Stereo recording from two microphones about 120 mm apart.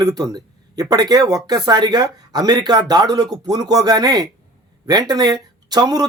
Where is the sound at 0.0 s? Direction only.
30° right (ahead or behind).